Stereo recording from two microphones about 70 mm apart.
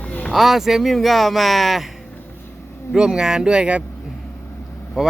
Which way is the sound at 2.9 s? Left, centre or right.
Centre.